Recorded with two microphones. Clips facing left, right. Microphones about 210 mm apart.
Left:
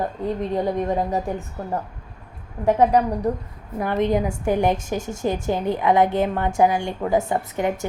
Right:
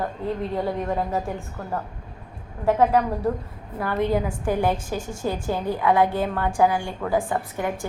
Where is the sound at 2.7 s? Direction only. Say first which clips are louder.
Left 2 dB; 15° left (ahead or behind).